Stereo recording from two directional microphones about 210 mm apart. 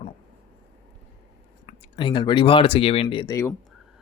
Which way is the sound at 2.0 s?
25° left (ahead or behind).